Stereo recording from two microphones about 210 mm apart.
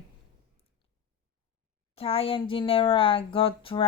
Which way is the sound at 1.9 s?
25° left (ahead or behind).